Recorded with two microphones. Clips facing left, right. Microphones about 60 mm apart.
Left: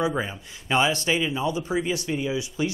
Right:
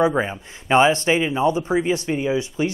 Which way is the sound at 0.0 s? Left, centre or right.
Right.